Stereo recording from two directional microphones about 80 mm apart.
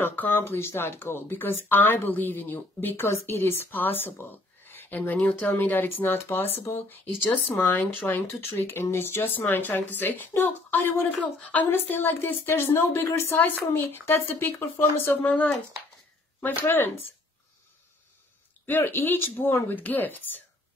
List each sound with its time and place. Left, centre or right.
0.0 s speech: left
16.4 s speech: left
18.7 s speech: left